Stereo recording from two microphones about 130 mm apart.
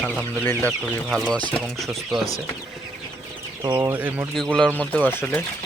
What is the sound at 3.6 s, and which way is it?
Speech, 25° right (ahead or behind).